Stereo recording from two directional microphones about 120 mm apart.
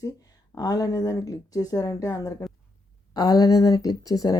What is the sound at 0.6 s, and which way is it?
Speech, 30° left (ahead or behind).